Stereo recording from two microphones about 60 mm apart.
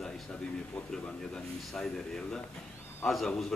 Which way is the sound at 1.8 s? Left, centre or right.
Centre.